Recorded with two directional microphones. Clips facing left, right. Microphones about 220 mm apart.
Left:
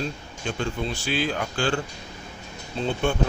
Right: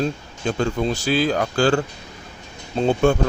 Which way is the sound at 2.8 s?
45° right (ahead or behind).